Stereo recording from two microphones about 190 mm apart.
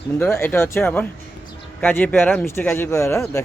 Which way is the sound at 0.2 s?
10° left (ahead or behind).